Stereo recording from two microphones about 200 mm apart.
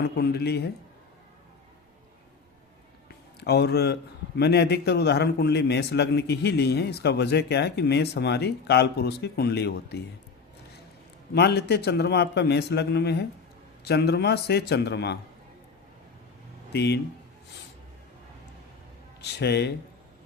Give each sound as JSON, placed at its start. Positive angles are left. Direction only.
{"t": 0.0, "sound": "speech", "side_deg": 55}
{"t": 3.4, "sound": "a man's voice", "side_deg": 55}
{"t": 11.3, "sound": "a man's voice", "side_deg": 55}
{"t": 16.7, "sound": "a man's voice", "side_deg": 55}
{"t": 19.2, "sound": "a man's voice", "side_deg": 55}